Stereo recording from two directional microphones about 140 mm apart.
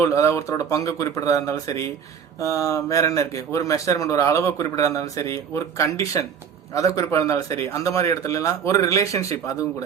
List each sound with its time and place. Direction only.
0.0 s speech: 20° left (ahead or behind)